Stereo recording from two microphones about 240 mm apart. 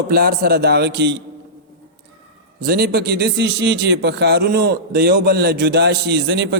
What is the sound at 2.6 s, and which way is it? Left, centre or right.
A man's voice, right.